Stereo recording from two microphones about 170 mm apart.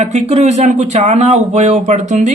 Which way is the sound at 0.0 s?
40° right (ahead or behind).